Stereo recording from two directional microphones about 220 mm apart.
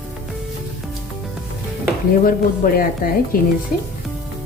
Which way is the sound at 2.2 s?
40° left (ahead or behind).